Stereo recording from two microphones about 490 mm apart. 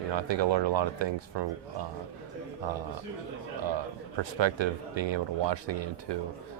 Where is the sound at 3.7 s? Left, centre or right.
Right.